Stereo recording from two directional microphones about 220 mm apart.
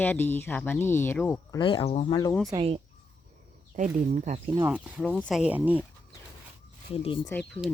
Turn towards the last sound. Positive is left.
turn(degrees=5)  # may be behind; listen again after turning